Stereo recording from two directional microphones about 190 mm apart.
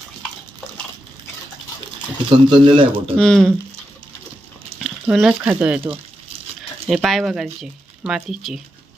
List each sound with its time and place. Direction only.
2.3 s speech: 25° right (ahead or behind)
3.2 s speech: 5° left (ahead or behind)
4.8 s speech: centre (ahead or behind)